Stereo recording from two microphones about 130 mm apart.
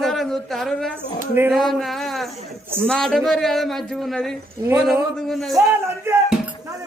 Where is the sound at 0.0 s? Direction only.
Centre (ahead or behind).